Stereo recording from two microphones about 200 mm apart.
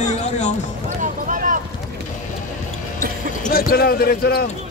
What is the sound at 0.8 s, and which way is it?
Basketball bounce, 40° right (ahead or behind).